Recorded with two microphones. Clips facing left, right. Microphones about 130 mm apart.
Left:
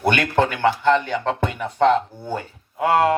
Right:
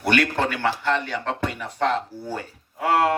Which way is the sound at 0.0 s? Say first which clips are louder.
Left 3 dB; 40° left (ahead or behind).